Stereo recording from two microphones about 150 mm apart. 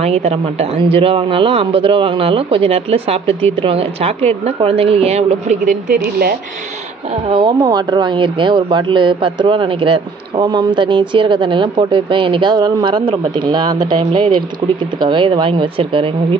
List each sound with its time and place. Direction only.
0.0 s speech: 45° right (ahead or behind); by 6.3 s 75° right (ahead or behind)
7.3 s speech: 30° right (ahead or behind)